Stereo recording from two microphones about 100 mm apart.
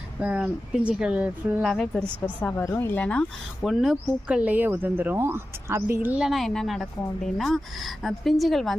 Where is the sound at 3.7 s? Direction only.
Centre (ahead or behind).